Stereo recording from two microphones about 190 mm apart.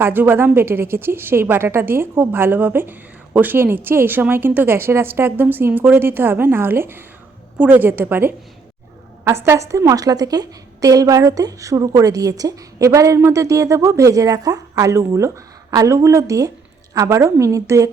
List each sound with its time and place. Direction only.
0.0 s a woman's voice: 10° right (ahead or behind)